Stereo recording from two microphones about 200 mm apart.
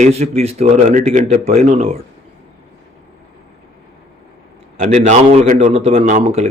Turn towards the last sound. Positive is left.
turn(degrees=-35)  # may be behind; listen again after turning